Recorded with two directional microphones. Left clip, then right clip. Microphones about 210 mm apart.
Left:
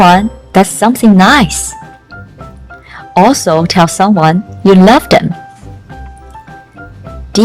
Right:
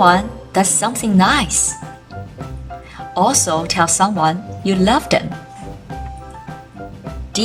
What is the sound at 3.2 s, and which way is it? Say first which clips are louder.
A woman's voice: left 5 dB; 40° left (ahead or behind).